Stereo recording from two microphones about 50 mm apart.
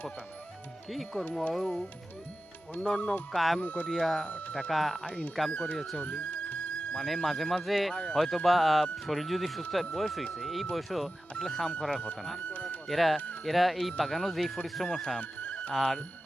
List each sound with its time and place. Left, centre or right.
0.9 s speech: centre
2.8 s speech: centre
3.3 s speech: centre
3.6 s speech: left
3.8 s speech: centre
4.3 s speech: left
4.7 s speech: centre
5.0 s speech: left
5.7 s speech: centre
6.0 s music: left
6.9 s speech: centre
15.2 s music: left
15.7 s speech: centre